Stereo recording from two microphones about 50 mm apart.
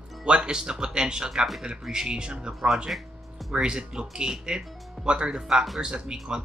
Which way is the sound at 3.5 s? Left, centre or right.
Centre.